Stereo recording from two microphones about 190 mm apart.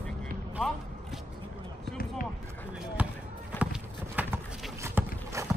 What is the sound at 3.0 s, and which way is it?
Basketball bounce, 10° right (ahead or behind).